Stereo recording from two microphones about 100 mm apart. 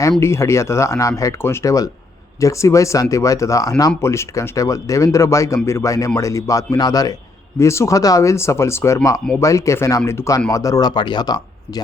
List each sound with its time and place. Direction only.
0.2 s speech: 25° left (ahead or behind); by 11.8 s 45° left (ahead or behind)